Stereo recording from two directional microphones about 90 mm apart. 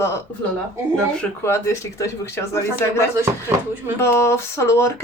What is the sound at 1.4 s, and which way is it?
Speech, 35° left (ahead or behind).